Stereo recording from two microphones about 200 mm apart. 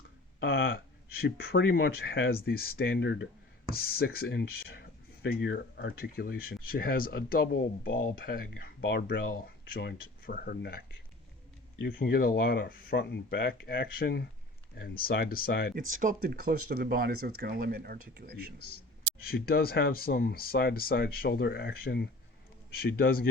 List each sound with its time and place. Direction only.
0.3 s speech: 60° left (ahead or behind)
1.2 s speech: 50° left (ahead or behind)
16.0 s speech: 45° right (ahead or behind)
19.2 s speech: 50° left (ahead or behind)